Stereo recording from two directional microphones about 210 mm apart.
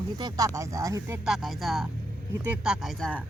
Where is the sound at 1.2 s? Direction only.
Centre (ahead or behind).